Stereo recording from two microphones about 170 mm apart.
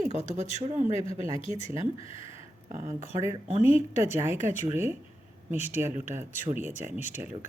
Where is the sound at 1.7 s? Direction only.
35° left (ahead or behind).